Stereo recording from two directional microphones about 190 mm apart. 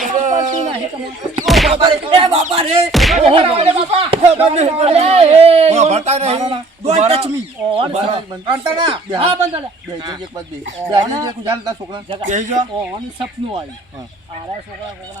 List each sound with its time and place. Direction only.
0.0 s a sound: 40° right (ahead or behind)
1.5 s music: centre (ahead or behind)
1.7 s speech: 30° right (ahead or behind)
2.9 s speech: centre (ahead or behind)
3.2 s a man's voice: 30° right (ahead or behind)
12.3 s a man's voice: 40° right (ahead or behind)
13.1 s speech: 25° right (ahead or behind)